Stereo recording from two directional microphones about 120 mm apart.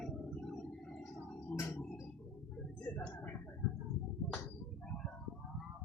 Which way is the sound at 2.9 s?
15° left (ahead or behind).